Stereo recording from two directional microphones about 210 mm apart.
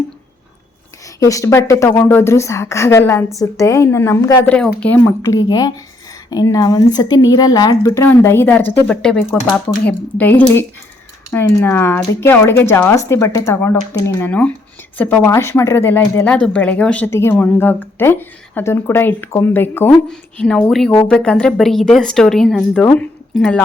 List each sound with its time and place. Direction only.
1.2 s speech: 15° left (ahead or behind)